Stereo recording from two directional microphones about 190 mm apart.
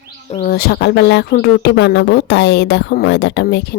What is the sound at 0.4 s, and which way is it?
Speech, 60° left (ahead or behind).